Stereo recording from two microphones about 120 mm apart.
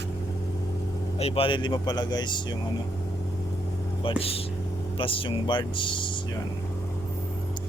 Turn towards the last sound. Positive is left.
turn(degrees=45)  # may be behind; listen again after turning